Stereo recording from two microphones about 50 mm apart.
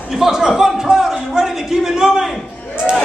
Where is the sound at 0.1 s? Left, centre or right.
Centre.